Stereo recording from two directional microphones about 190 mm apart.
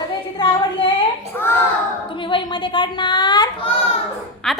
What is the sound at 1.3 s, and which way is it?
Speech, 10° left (ahead or behind).